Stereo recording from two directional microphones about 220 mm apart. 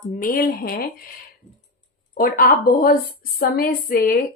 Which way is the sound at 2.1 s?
40° left (ahead or behind).